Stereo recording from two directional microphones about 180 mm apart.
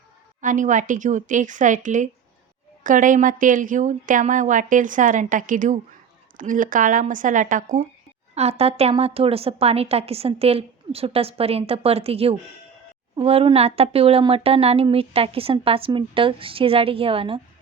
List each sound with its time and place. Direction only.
0.4 s speech: 45° right (ahead or behind)
8.4 s speech: 35° right (ahead or behind)